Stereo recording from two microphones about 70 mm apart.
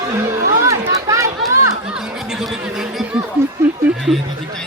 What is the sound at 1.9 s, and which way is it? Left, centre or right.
Speech, centre.